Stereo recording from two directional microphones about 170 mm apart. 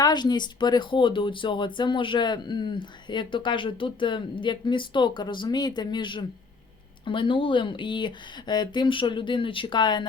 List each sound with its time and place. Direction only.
0.0 s speech: 25° left (ahead or behind)